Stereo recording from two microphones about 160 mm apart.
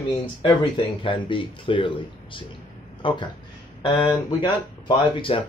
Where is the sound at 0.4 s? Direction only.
30° left (ahead or behind).